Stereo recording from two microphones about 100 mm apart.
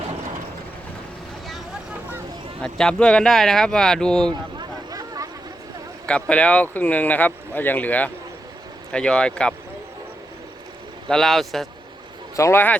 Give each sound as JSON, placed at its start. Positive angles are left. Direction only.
{"t": 2.6, "sound": "speech", "side_deg": 5}
{"t": 4.3, "sound": "a sound", "side_deg": -45}
{"t": 6.1, "sound": "speech", "side_deg": 10}
{"t": 11.1, "sound": "a man's voice", "side_deg": 5}
{"t": 12.4, "sound": "speech", "side_deg": 25}